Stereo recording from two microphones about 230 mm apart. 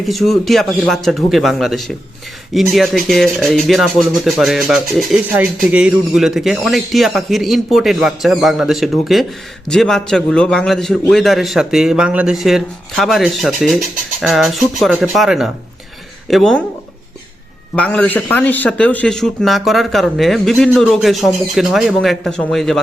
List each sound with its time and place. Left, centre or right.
0.0 s speech: centre
17.7 s speech: centre